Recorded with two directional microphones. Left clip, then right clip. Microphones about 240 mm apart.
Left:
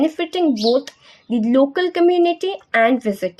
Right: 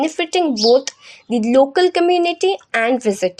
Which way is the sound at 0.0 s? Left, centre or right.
Right.